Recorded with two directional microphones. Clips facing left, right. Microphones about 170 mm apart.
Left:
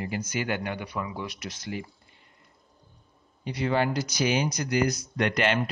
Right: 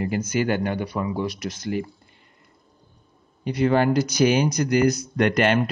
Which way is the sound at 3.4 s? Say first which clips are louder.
Right 6 dB; 50° right (ahead or behind).